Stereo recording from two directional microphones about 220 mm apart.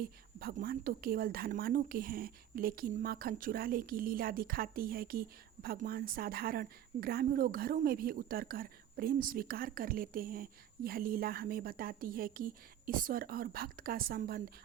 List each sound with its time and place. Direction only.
0.0 s a woman's voice: 40° right (ahead or behind)